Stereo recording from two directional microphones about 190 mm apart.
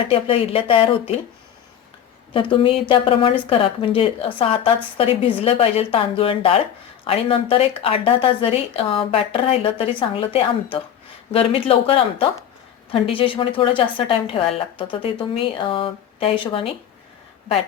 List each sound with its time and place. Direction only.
0.1 s a woman's voice: 30° left (ahead or behind)
2.3 s a woman's voice: 25° left (ahead or behind)